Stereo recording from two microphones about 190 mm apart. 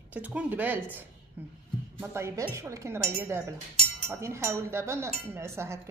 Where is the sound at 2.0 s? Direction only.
15° right (ahead or behind).